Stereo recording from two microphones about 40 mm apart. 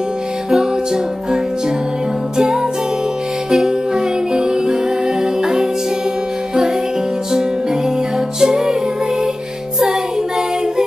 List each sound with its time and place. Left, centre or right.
2.3 s music: centre
8.4 s music: centre